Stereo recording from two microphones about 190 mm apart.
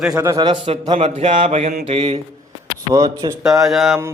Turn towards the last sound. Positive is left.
turn(degrees=0)  # may be behind; listen again after turning